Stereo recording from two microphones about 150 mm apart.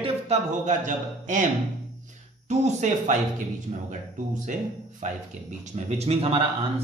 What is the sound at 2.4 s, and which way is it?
Speech, 50° right (ahead or behind).